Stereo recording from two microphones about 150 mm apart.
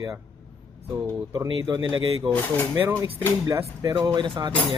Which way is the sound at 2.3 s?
10° left (ahead or behind).